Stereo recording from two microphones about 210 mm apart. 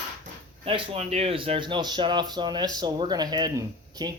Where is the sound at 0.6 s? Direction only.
25° right (ahead or behind).